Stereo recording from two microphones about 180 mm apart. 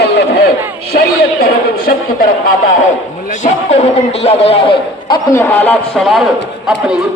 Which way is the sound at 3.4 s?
40° left (ahead or behind).